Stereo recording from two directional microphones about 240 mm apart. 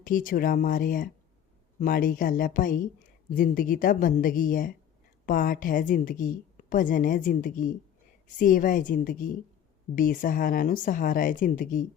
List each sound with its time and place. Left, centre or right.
0.0 s a woman's voice: left